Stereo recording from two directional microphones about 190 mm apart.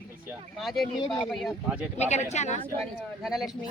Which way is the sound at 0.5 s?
Centre (ahead or behind).